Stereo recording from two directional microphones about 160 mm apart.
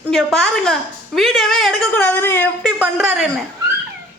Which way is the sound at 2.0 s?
10° left (ahead or behind).